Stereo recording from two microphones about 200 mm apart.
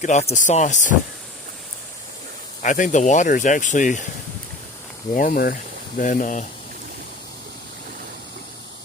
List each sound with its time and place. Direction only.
0.0 s speech: 35° left (ahead or behind)
2.6 s speech: 40° left (ahead or behind)
5.1 s speech: 40° left (ahead or behind)